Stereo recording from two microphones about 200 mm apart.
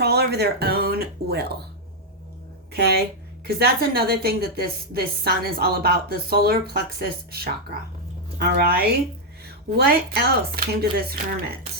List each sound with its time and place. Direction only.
0.0 s a sound: 55° right (ahead or behind)
2.7 s a woman's voice: 55° right (ahead or behind)
10.2 s a woman's voice: 50° right (ahead or behind)